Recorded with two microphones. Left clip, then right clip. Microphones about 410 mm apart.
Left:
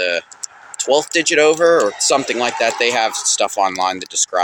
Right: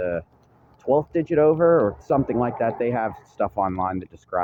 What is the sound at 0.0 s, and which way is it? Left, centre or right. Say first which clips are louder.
Speech: left 7 dB; right.